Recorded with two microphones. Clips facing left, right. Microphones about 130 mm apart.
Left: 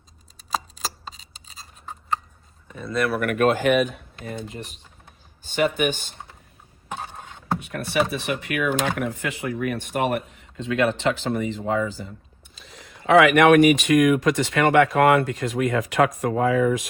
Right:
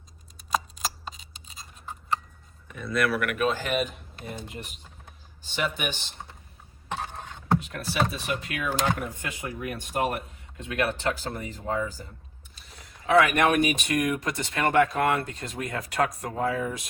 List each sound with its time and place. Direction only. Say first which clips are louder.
1.0 s scissors: even; 35° left (ahead or behind)
3.2 s speech: left 5 dB; 45° left (ahead or behind)
3.4 s speech: left 9 dB; 60° left (ahead or behind)
4.4 s speech: left 4 dB; 35° left (ahead or behind)
5.4 s speech: left 8 dB; 50° left (ahead or behind)
6.8 s a sound: even; 10° left (ahead or behind)
7.7 s speech: left 5 dB; 65° left (ahead or behind)
9.0 s speech: left 7 dB; 80° left